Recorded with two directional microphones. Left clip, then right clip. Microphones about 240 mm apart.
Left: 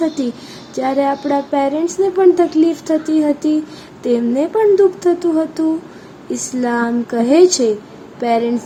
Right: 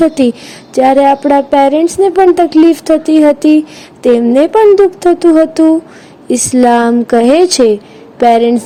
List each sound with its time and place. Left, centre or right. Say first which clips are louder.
0.7 s a woman's voice: right 10 dB; right